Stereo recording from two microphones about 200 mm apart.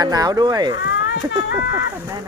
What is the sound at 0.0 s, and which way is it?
Speech, 20° right (ahead or behind).